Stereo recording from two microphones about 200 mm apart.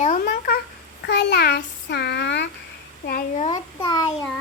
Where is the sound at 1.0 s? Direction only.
55° left (ahead or behind).